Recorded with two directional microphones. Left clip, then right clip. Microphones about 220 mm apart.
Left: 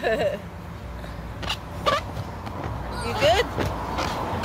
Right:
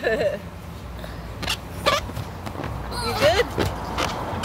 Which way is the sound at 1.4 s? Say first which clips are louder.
Right 2 dB; 25° right (ahead or behind).